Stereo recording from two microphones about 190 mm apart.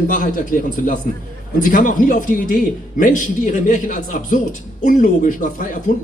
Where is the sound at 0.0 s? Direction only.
45° left (ahead or behind).